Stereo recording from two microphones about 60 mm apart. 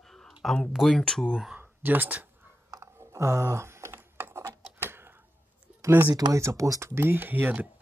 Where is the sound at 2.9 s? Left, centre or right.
Right.